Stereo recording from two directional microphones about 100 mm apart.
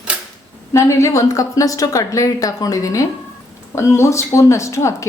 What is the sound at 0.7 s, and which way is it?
A woman's voice, 30° left (ahead or behind).